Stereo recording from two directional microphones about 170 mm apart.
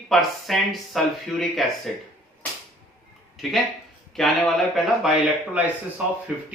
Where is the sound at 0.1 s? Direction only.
Centre (ahead or behind).